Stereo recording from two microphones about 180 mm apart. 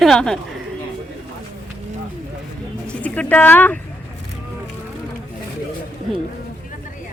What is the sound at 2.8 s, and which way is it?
Speech, 5° left (ahead or behind).